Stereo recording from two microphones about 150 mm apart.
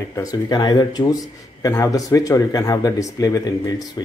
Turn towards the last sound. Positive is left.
turn(degrees=25)  # may be behind; listen again after turning